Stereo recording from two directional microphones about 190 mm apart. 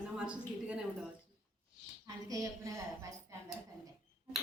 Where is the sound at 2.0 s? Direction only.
20° right (ahead or behind).